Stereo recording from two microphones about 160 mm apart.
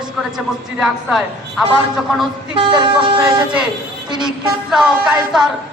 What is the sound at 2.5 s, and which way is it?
Speech, 30° right (ahead or behind).